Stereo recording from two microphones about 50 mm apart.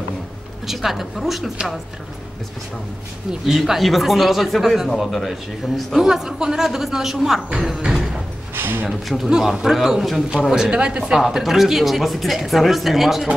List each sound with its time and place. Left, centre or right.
0.7 s speech: centre
3.3 s speech: centre
6.0 s a woman's voice: centre
7.6 s a sound: centre
8.5 s a sound: right
8.8 s a woman's voice: centre
11.1 s speech: centre